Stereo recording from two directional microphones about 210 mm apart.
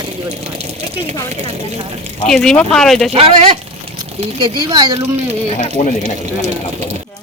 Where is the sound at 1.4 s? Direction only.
30° right (ahead or behind).